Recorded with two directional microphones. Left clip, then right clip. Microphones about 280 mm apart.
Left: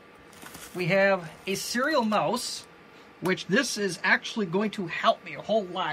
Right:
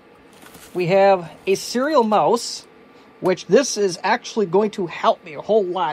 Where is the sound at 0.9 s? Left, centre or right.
Centre.